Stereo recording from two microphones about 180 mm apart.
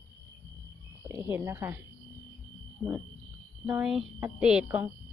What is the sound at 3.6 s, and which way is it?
Speech, 5° right (ahead or behind).